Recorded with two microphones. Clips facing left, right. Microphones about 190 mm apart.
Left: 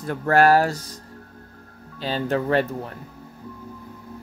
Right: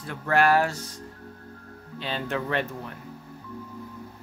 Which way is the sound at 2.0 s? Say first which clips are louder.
Left 6 dB; 40° left (ahead or behind).